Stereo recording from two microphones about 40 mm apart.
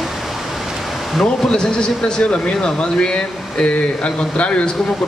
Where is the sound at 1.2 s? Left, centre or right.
Left.